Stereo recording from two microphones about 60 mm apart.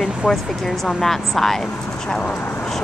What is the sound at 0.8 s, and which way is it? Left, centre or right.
Speech, centre.